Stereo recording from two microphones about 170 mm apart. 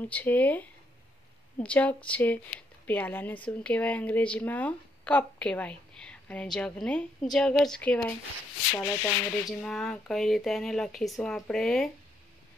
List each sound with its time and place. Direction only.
0.0 s a woman's voice: 10° left (ahead or behind)
8.7 s a woman's voice: 15° left (ahead or behind)
9.5 s speech: 5° left (ahead or behind)